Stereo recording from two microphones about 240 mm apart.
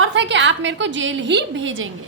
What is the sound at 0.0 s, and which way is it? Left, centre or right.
A woman's voice, right.